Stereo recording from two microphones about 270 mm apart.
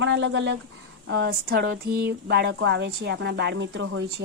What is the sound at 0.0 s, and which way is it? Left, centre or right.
Speech, right.